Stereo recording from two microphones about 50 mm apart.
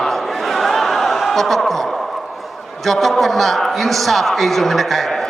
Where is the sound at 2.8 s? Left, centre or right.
Centre.